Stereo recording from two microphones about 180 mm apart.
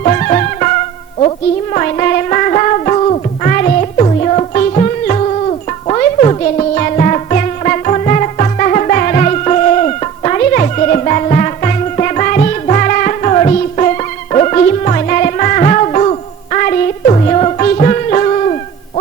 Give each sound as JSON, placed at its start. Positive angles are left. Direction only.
{"t": 0.0, "sound": "music", "side_deg": 40}
{"t": 1.7, "sound": "music", "side_deg": 45}